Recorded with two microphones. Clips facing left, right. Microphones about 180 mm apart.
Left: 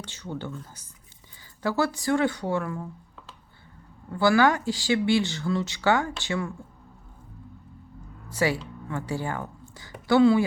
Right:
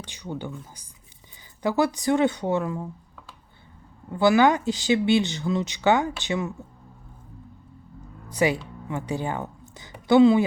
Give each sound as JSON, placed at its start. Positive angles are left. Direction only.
{"t": 0.0, "sound": "speech", "side_deg": -15}
{"t": 4.1, "sound": "speech", "side_deg": -20}
{"t": 8.3, "sound": "a woman's voice", "side_deg": -20}